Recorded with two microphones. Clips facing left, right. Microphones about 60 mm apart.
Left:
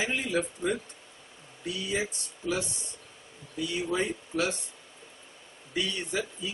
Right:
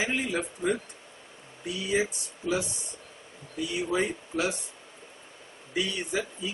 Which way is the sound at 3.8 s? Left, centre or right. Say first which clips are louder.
Right 3 dB; centre.